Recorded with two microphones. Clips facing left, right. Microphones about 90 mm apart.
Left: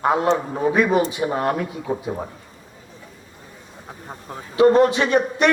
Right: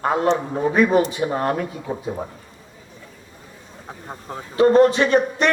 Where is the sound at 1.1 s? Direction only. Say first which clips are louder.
Even; 35° right (ahead or behind).